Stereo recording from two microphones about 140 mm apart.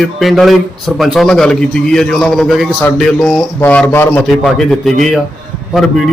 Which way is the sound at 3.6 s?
15° left (ahead or behind).